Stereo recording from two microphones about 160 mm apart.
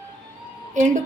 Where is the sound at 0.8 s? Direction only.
50° right (ahead or behind).